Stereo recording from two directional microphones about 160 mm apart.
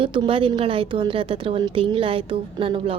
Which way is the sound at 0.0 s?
35° right (ahead or behind).